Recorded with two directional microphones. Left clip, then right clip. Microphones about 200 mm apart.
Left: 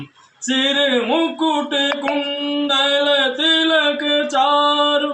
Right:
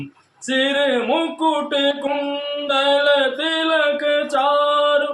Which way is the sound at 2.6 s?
15° right (ahead or behind).